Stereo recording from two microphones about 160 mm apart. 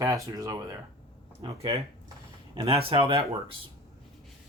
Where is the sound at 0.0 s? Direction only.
20° right (ahead or behind).